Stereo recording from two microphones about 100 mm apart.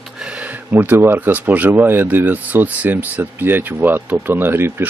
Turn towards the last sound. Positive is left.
turn(degrees=-20)  # may be behind; listen again after turning